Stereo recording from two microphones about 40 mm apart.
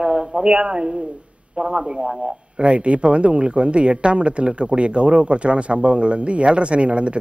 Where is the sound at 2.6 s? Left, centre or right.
Right.